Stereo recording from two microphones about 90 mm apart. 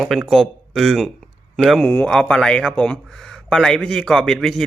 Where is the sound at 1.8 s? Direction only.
20° left (ahead or behind).